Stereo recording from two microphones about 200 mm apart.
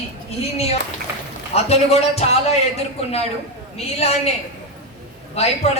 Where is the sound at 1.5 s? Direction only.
30° left (ahead or behind).